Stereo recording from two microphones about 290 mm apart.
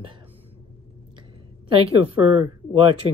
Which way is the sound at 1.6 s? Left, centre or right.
Centre.